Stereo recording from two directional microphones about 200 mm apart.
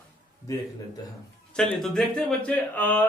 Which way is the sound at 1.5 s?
5° left (ahead or behind).